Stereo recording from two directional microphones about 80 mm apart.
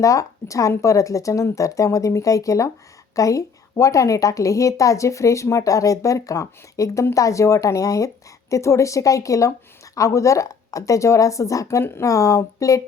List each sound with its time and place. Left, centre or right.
0.0 s a woman's voice: left